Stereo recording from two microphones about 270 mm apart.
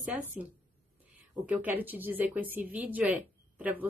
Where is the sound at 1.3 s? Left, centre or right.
Centre.